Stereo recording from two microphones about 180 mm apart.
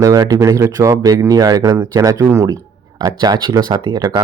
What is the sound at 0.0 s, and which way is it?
Speech, 20° right (ahead or behind).